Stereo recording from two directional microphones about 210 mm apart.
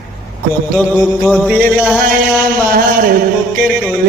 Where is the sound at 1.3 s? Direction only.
5° right (ahead or behind).